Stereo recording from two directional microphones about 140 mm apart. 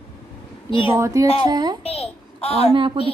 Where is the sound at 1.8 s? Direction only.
45° left (ahead or behind).